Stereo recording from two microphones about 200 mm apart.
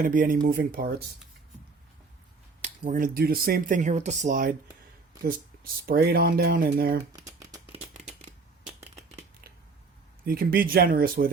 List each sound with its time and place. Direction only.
0.0 s speech: 45° right (ahead or behind)
2.6 s speech: 35° right (ahead or behind)
5.8 s speech: 50° right (ahead or behind)
8.6 s a sound: 5° right (ahead or behind)
10.2 s speech: 45° right (ahead or behind)